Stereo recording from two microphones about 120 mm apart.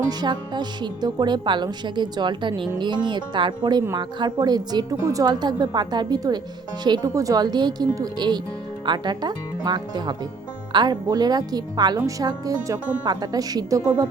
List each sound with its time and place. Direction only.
0.1 s a woman's voice: 35° right (ahead or behind)